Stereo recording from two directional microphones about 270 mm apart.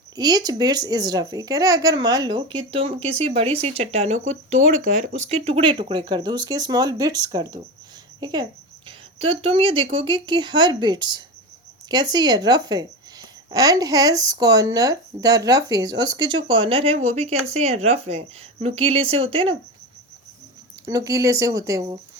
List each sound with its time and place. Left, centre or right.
0.2 s speech: centre
20.8 s speech: centre